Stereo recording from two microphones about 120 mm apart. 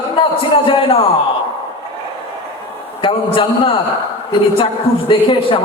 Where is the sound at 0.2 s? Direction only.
45° left (ahead or behind).